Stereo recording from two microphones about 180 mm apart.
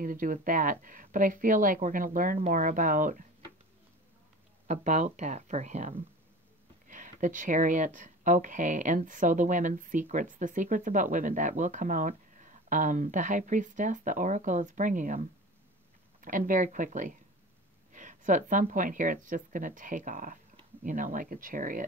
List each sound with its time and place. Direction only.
0.0 s speech: 50° right (ahead or behind)
4.6 s speech: 40° right (ahead or behind)